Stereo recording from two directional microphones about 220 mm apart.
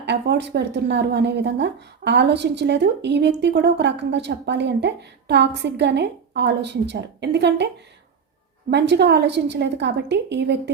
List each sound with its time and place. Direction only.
0.0 s speech: 50° right (ahead or behind)
8.7 s speech: 50° right (ahead or behind)